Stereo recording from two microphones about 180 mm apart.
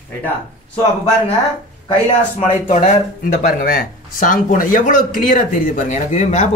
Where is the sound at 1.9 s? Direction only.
40° left (ahead or behind).